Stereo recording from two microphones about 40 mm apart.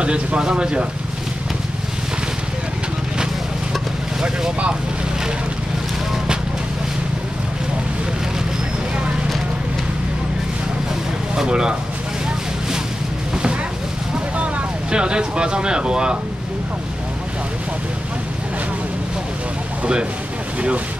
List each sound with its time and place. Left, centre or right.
0.0 s speech: right
4.2 s speech: right
11.3 s speech: right
13.3 s a sound: right
14.9 s speech: right